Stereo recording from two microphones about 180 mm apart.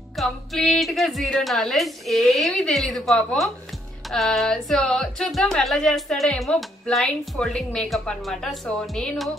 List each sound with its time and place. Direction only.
0.1 s speech: centre (ahead or behind)